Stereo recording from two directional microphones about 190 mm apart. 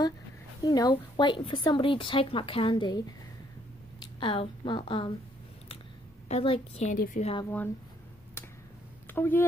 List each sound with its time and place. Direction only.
0.6 s speech: 20° left (ahead or behind)
4.0 s speech: 25° left (ahead or behind)
6.2 s a woman's voice: 30° left (ahead or behind)
9.1 s speech: 10° left (ahead or behind)